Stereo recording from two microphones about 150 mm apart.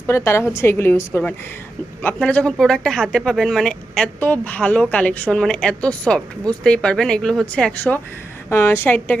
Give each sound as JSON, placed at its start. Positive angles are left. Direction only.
{"t": 0.1, "sound": "a woman's voice", "side_deg": 20}